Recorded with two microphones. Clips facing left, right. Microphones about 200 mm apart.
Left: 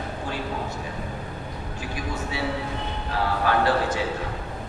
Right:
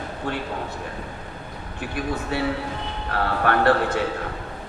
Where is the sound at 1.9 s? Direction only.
60° right (ahead or behind).